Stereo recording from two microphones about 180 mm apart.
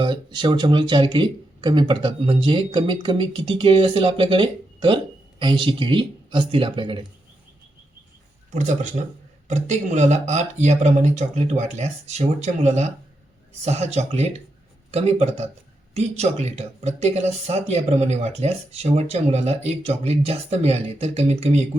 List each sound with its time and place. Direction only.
0.0 s speech: 25° right (ahead or behind)
8.5 s a man's voice: 40° right (ahead or behind)